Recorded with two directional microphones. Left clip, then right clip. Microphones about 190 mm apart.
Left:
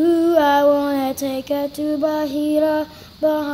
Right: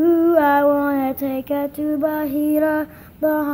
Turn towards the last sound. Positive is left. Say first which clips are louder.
# left 1 dB
turn(degrees=0)  # may be behind; listen again after turning